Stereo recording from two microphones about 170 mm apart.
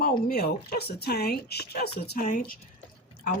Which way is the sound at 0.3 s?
65° left (ahead or behind).